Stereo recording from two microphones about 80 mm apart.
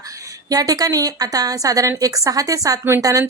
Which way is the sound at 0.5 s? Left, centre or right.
Right.